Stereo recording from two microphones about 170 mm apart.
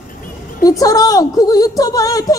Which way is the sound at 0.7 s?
20° left (ahead or behind).